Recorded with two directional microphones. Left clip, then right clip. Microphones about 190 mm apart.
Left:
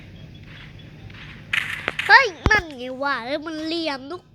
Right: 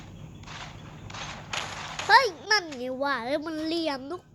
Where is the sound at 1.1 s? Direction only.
45° right (ahead or behind).